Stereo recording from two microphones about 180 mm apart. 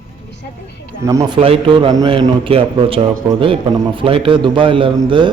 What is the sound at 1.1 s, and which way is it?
A man's voice, 20° right (ahead or behind).